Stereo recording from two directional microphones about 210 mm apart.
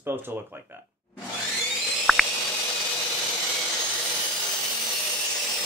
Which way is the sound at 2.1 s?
Centre (ahead or behind).